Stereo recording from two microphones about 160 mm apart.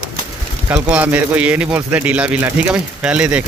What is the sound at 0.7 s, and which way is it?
Speech, 10° right (ahead or behind).